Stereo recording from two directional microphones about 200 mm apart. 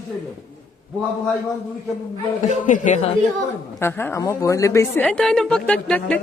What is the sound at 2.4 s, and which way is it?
Speech, 40° left (ahead or behind).